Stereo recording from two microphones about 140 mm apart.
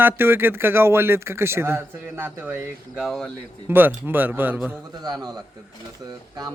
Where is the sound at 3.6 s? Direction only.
15° right (ahead or behind).